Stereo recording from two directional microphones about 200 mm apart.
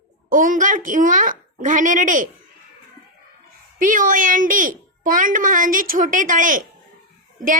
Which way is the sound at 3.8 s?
40° right (ahead or behind).